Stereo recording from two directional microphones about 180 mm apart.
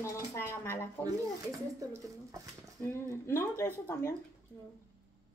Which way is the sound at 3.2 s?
15° left (ahead or behind).